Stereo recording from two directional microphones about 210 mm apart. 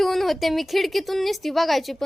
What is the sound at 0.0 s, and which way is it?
A woman's voice, centre (ahead or behind).